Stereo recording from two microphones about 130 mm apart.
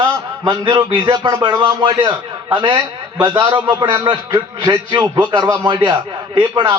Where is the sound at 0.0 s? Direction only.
35° right (ahead or behind).